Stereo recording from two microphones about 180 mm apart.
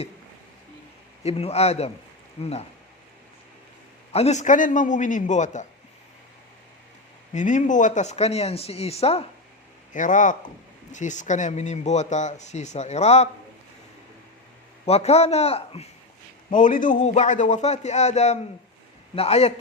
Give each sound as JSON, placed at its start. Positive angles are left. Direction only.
{"t": 1.2, "sound": "speech", "side_deg": 35}
{"t": 4.1, "sound": "a man's voice", "side_deg": 35}
{"t": 7.3, "sound": "speech", "side_deg": 45}
{"t": 9.9, "sound": "a man's voice", "side_deg": 45}
{"t": 14.8, "sound": "speech", "side_deg": 35}
{"t": 16.5, "sound": "a man's voice", "side_deg": 45}